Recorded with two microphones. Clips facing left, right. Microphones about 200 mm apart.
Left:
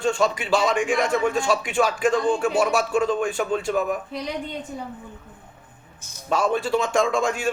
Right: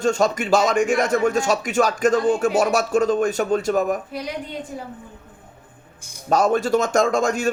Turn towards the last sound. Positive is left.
turn(degrees=-40)  # may be behind; listen again after turning